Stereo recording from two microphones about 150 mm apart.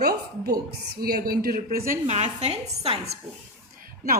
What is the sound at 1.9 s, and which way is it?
A woman's voice, 50° right (ahead or behind).